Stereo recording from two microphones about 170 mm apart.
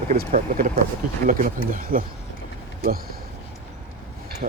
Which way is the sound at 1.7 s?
55° right (ahead or behind).